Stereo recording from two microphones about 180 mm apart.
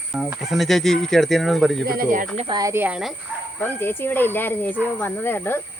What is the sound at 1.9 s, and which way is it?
Speech, 55° right (ahead or behind).